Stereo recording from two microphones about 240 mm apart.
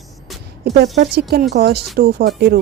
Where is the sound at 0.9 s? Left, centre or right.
Right.